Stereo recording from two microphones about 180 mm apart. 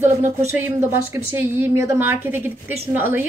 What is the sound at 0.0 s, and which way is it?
A woman's voice, 15° right (ahead or behind).